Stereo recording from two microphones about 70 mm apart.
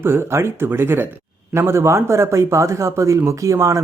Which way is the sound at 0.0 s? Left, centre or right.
Right.